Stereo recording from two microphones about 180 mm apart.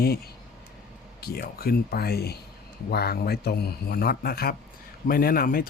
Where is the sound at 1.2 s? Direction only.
60° left (ahead or behind).